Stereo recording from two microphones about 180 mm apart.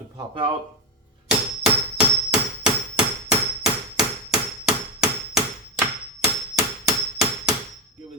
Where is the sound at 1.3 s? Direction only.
5° right (ahead or behind).